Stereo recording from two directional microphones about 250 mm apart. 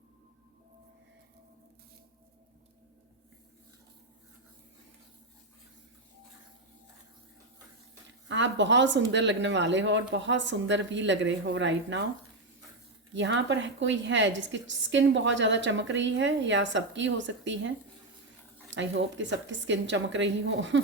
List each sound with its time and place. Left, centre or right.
8.3 s a woman's voice: right
13.1 s a woman's voice: right
18.7 s a woman's voice: right